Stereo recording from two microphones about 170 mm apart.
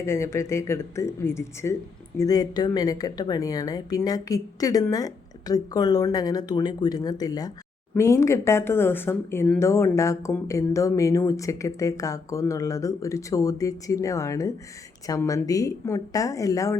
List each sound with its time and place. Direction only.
0.0 s speech: 15° left (ahead or behind)